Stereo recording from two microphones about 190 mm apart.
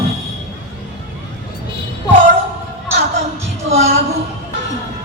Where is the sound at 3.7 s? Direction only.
35° right (ahead or behind).